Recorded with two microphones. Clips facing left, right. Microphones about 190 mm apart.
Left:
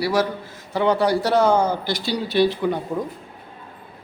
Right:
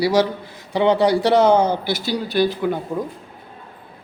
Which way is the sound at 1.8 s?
5° right (ahead or behind).